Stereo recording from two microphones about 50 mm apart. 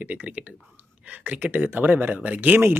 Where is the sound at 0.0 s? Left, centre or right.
Right.